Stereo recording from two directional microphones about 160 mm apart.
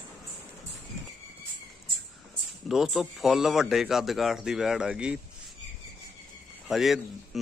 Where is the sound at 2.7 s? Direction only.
Centre (ahead or behind).